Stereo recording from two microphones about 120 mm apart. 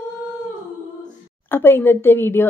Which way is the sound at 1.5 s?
15° left (ahead or behind).